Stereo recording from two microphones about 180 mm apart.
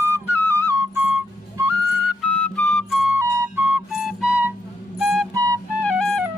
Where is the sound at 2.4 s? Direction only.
5° left (ahead or behind).